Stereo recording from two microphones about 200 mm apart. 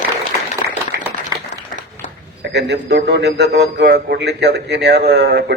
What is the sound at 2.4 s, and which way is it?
A man's voice, 60° right (ahead or behind).